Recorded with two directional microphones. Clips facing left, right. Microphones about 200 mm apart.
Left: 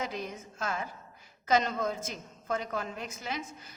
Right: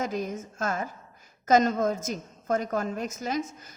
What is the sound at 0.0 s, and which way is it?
Speech, 45° right (ahead or behind).